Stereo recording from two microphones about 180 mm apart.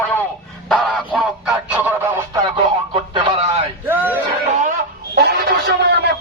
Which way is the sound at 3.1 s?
35° right (ahead or behind).